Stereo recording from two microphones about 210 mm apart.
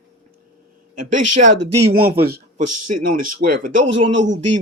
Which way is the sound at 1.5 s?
50° right (ahead or behind).